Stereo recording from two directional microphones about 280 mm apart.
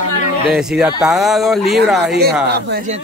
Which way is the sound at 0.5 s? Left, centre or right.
Centre.